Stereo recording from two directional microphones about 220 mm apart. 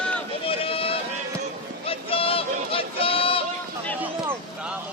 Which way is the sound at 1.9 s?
25° left (ahead or behind).